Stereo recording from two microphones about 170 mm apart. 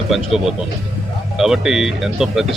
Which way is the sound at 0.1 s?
Centre (ahead or behind).